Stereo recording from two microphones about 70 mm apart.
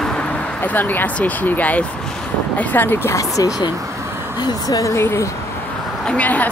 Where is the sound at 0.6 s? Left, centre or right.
Left.